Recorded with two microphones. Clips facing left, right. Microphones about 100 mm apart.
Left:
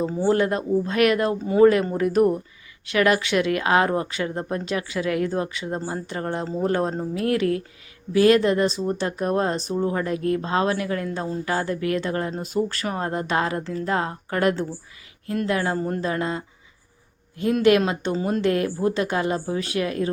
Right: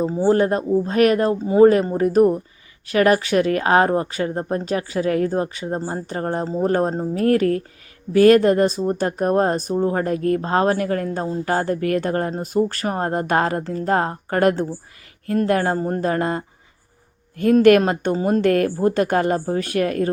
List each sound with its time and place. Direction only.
0.0 s speech: 20° right (ahead or behind)
0.3 s speech: 35° right (ahead or behind)